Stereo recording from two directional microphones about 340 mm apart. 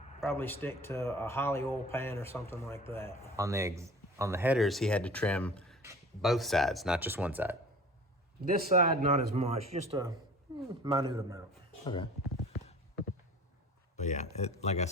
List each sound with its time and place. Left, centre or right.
0.2 s speech: centre
3.3 s speech: centre
8.7 s a man's voice: centre
13.9 s speech: left